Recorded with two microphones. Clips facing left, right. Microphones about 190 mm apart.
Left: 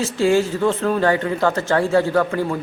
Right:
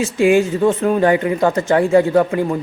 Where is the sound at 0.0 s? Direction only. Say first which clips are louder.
Right 3 dB; 15° right (ahead or behind).